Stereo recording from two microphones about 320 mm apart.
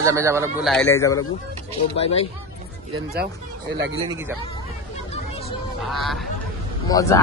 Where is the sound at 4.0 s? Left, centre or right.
Centre.